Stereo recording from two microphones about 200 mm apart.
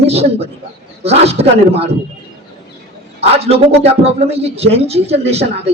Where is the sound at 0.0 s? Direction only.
30° right (ahead or behind).